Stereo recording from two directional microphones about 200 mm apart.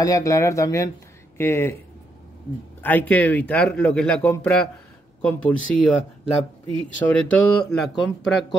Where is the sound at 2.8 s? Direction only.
10° left (ahead or behind).